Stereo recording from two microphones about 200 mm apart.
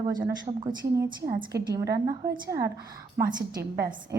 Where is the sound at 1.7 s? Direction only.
15° right (ahead or behind).